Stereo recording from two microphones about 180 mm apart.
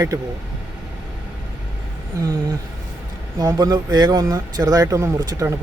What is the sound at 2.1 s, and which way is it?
Speech, 20° right (ahead or behind).